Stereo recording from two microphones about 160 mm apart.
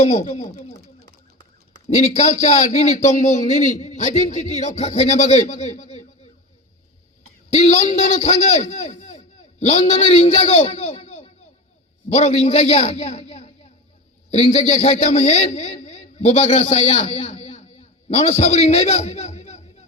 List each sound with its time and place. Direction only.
0.0 s a man's voice: 50° left (ahead or behind)
1.9 s a man's voice: 45° left (ahead or behind)
7.5 s a man's voice: 45° left (ahead or behind)